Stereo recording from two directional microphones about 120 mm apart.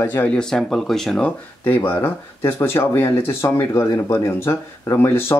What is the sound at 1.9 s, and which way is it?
Speech, 15° left (ahead or behind).